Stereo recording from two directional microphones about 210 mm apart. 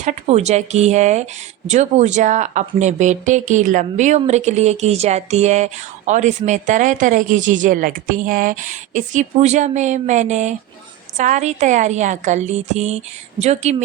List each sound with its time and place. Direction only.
0.0 s a woman's voice: 35° right (ahead or behind)